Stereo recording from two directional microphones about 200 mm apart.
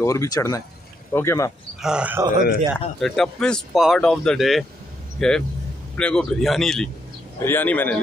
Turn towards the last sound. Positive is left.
turn(degrees=10)  # may be behind; listen again after turning